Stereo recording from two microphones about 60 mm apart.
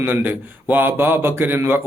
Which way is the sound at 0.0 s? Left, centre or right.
Right.